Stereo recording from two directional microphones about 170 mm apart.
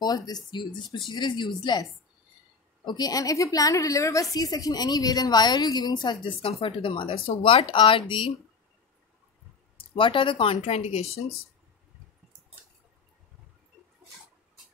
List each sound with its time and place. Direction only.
0.0 s a woman's voice: 25° left (ahead or behind)
9.8 s a woman's voice: 30° left (ahead or behind)